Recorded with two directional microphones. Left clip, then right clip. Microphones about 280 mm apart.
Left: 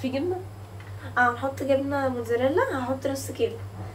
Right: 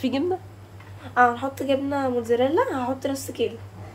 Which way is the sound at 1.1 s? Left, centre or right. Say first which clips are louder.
Right 3 dB; right.